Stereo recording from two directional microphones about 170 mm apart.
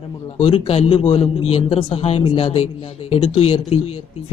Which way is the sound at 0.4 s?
35° left (ahead or behind).